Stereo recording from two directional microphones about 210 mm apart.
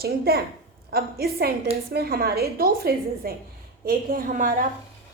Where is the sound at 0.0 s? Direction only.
50° right (ahead or behind).